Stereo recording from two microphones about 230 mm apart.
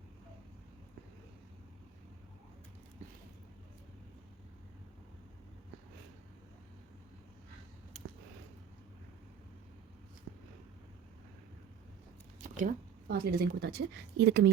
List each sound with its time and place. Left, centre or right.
12.4 s speech: right